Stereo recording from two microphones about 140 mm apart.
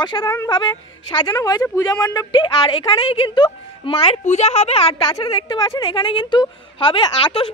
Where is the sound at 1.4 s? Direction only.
25° left (ahead or behind); by 5.0 s 45° left (ahead or behind).